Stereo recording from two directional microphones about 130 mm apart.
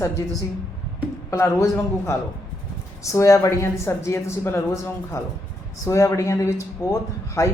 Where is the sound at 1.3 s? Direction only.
20° left (ahead or behind).